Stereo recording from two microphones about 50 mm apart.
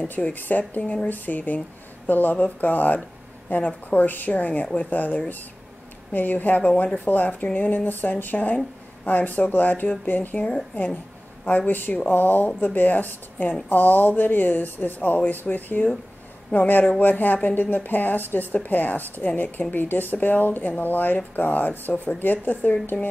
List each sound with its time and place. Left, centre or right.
0.1 s speech: left
10.4 s a woman's voice: left
11.4 s speech: left